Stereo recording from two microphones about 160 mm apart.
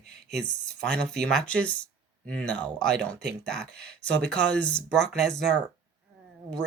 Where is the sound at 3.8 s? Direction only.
90° right.